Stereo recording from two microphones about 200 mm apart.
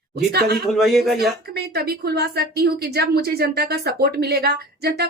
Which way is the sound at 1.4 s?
50° right (ahead or behind).